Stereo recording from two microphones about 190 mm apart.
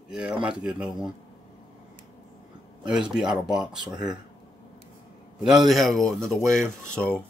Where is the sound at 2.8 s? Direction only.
5° right (ahead or behind).